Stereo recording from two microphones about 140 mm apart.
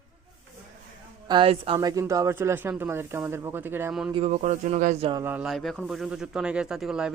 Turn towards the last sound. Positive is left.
turn(degrees=-5)  # may be behind; listen again after turning